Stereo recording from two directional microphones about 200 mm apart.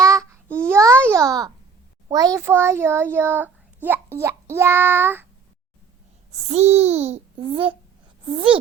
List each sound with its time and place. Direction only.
0.0 s child singing: 15° right (ahead or behind)
0.6 s babbling: 15° right (ahead or behind)
2.0 s a child's voice: 15° right (ahead or behind)
6.5 s a child's voice: 35° right (ahead or behind)